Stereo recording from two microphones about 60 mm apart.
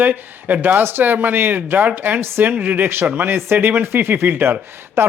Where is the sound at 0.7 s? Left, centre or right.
Right.